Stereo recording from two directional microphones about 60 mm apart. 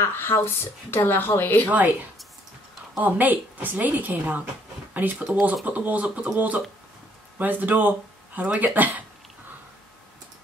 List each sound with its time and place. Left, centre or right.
0.0 s a woman's voice: left
3.0 s a woman's voice: right